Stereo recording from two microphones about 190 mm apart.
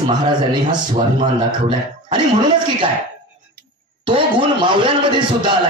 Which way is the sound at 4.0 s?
25° right (ahead or behind).